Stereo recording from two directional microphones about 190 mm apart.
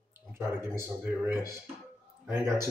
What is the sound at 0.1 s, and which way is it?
Speech, 10° right (ahead or behind).